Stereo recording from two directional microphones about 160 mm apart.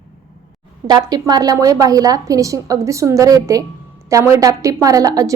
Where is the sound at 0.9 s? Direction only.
25° right (ahead or behind).